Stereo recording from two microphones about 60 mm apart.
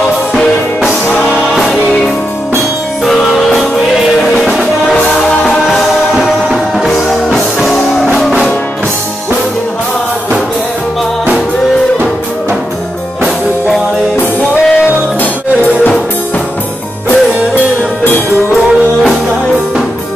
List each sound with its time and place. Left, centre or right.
1.5 s music: centre
3.1 s music: centre
14.6 s music: centre
15.6 s music: left
18.0 s music: left